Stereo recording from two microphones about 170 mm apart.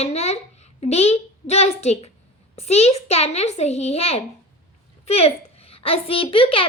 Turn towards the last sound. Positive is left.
turn(degrees=30)  # may be behind; listen again after turning